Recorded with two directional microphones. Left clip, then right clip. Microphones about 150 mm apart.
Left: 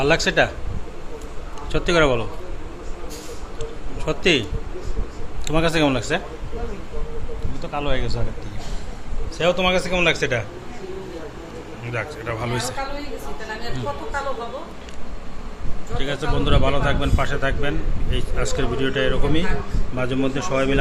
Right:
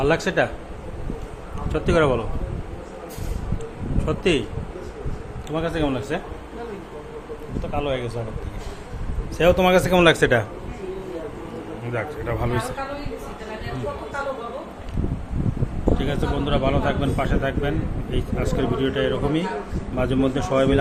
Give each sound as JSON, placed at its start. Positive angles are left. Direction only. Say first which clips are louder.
{"t": 0.0, "sound": "a man's voice", "louder": "left 2 dB", "side_deg": 0}
{"t": 1.7, "sound": "a man's voice", "louder": "left 1 dB", "side_deg": 0}
{"t": 4.0, "sound": "a man's voice", "louder": "left 3 dB", "side_deg": 0}
{"t": 5.5, "sound": "a man's voice", "louder": "left 5 dB", "side_deg": 30}
{"t": 6.0, "sound": "a man's voice", "louder": "left 4 dB", "side_deg": 15}
{"t": 7.7, "sound": "a man's voice", "louder": "even", "side_deg": 10}
{"t": 9.4, "sound": "speech", "louder": "right 3 dB", "side_deg": -35}
{"t": 11.9, "sound": "a man's voice", "louder": "even", "side_deg": -15}
{"t": 16.0, "sound": "a man's voice", "louder": "left 1 dB", "side_deg": -10}